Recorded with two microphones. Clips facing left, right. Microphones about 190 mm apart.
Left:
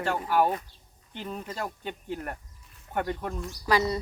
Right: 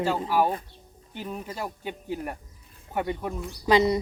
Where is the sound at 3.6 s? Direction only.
20° right (ahead or behind).